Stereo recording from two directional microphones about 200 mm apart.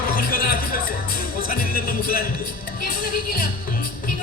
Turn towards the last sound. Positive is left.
turn(degrees=45)  # may be behind; listen again after turning